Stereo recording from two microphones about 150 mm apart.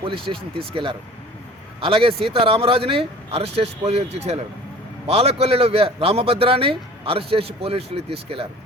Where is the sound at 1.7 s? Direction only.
40° right (ahead or behind).